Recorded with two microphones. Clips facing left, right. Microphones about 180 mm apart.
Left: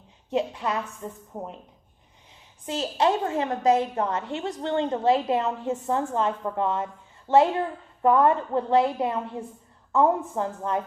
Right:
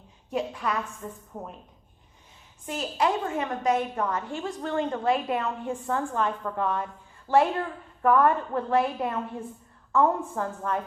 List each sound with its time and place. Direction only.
0.3 s a woman's voice: 25° left (ahead or behind)
2.6 s a woman's voice: 25° left (ahead or behind)